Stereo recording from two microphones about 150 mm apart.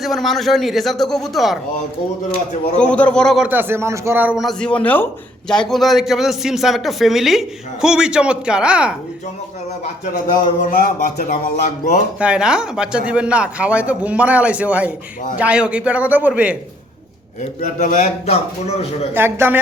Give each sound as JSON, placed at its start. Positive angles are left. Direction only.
{"t": 0.0, "sound": "a man's voice", "side_deg": 0}
{"t": 2.7, "sound": "a man's voice", "side_deg": 10}
{"t": 10.6, "sound": "music", "side_deg": 65}
{"t": 12.2, "sound": "a man's voice", "side_deg": -5}
{"t": 17.6, "sound": "a man's voice", "side_deg": 55}
{"t": 19.1, "sound": "a man's voice", "side_deg": -15}